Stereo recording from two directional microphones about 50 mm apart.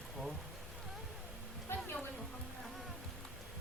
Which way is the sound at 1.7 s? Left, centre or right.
Left.